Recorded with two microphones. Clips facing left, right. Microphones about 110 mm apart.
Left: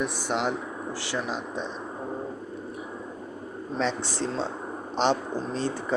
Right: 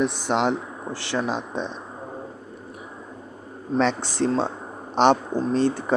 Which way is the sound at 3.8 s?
65° right (ahead or behind).